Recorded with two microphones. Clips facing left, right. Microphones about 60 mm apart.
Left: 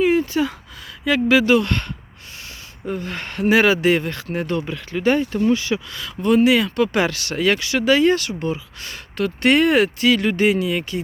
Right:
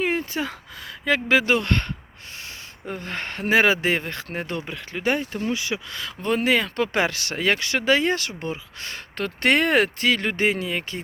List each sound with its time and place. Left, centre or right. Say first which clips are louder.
0.0 s a sound: left 7 dB; right
1.0 s speech: left 4 dB; right
5.9 s speech: left 6 dB; right
6.3 s speech: left 6 dB; right
6.7 s speech: left 4 dB; right